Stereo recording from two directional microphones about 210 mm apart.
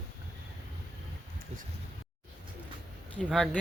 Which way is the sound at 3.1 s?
5° left (ahead or behind).